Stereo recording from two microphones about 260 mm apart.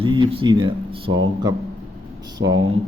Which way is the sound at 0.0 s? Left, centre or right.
Centre.